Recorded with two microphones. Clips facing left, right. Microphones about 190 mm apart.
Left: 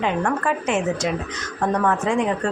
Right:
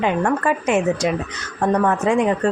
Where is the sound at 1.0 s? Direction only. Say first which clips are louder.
Right 3 dB; 50° right (ahead or behind).